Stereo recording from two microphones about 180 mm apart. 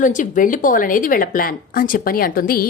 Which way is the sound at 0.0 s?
45° left (ahead or behind).